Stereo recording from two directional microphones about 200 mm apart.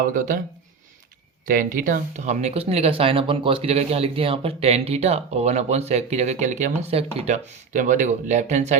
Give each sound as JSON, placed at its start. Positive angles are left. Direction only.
{"t": 0.0, "sound": "speech", "side_deg": -45}
{"t": 1.5, "sound": "speech", "side_deg": -45}